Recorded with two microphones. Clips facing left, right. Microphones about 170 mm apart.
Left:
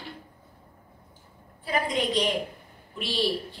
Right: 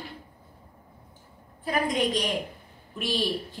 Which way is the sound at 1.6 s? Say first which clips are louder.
Right 1 dB; 45° right (ahead or behind).